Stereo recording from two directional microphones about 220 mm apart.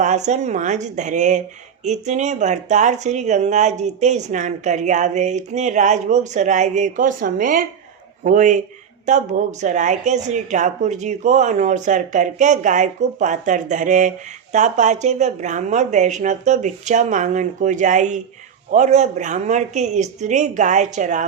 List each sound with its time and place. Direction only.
0.0 s speech: 35° right (ahead or behind)